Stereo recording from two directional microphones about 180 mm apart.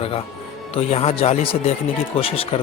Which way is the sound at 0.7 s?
35° left (ahead or behind).